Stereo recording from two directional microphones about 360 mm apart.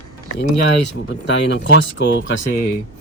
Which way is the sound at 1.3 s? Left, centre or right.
Left.